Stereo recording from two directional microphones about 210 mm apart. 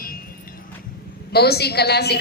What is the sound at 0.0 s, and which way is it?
Music, 40° left (ahead or behind).